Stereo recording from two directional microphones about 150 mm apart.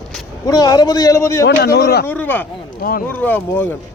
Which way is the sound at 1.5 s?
90° left.